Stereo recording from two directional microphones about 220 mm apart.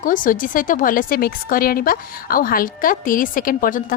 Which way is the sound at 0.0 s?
40° left (ahead or behind).